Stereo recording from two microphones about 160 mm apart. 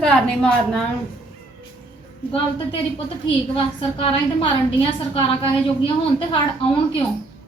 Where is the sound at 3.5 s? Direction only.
35° left (ahead or behind).